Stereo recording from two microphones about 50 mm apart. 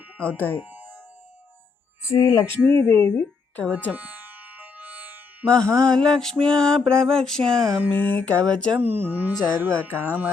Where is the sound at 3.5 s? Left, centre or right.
Left.